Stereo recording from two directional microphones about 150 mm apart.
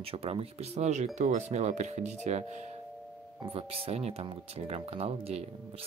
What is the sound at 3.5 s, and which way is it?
Speech, 40° right (ahead or behind).